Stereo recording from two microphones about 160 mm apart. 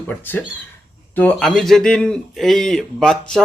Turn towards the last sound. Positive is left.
turn(degrees=5)  # may be behind; listen again after turning